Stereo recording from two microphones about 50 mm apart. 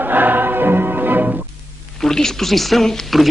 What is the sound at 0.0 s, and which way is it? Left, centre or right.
Music, right.